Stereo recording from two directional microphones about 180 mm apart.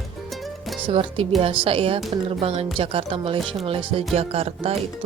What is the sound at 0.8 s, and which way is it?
Speech, 30° right (ahead or behind).